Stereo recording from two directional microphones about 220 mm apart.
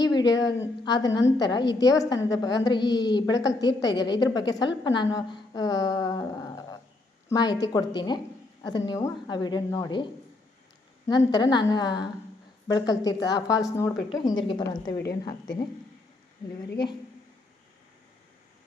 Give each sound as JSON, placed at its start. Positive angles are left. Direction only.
{"t": 0.0, "sound": "a woman's voice", "side_deg": 20}
{"t": 16.6, "sound": "a woman's voice", "side_deg": 50}